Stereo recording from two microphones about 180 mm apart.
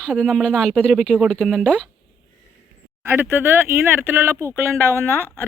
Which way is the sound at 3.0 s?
10° right (ahead or behind).